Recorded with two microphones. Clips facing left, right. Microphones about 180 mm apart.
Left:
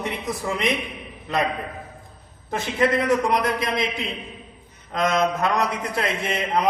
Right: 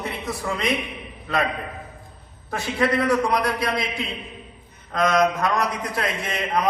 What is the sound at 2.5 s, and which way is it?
A man's voice, 20° left (ahead or behind).